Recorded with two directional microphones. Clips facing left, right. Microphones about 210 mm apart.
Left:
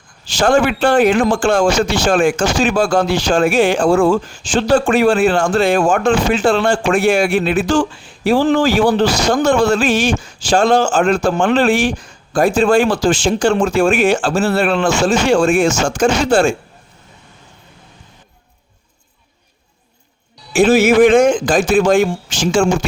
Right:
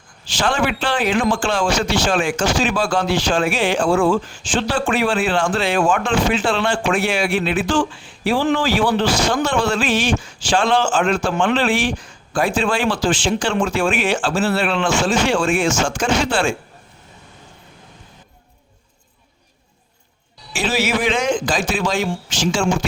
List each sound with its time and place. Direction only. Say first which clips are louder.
0.3 s a man's voice: left 7 dB; 45° left (ahead or behind)
20.5 s a man's voice: left 10 dB; 50° left (ahead or behind)